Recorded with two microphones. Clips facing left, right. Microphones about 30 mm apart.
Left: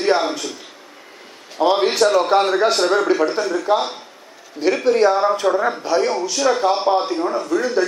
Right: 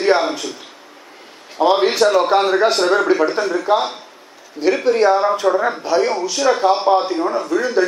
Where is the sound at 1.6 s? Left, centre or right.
Centre.